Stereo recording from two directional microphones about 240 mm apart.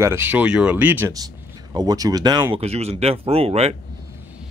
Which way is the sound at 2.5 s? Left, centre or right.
Right.